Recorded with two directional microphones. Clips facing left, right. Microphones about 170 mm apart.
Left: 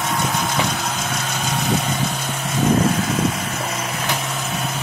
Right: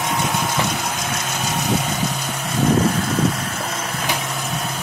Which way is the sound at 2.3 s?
Centre (ahead or behind).